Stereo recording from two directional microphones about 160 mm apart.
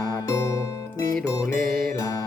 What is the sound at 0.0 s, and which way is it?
Music, 20° left (ahead or behind).